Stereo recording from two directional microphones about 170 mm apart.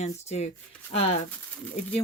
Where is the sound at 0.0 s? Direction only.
40° left (ahead or behind).